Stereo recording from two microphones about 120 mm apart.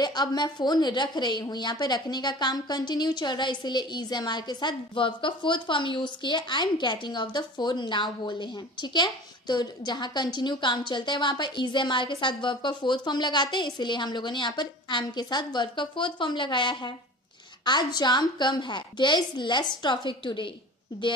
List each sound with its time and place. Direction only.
0.0 s a woman's voice: 35° left (ahead or behind)